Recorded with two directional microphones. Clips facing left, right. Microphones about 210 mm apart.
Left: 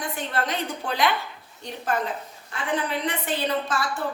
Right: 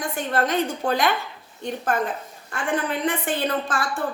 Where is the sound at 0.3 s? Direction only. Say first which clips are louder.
Right 7 dB; 45° right (ahead or behind).